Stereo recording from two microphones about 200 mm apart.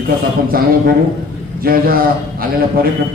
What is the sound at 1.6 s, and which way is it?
A man's voice, 45° right (ahead or behind).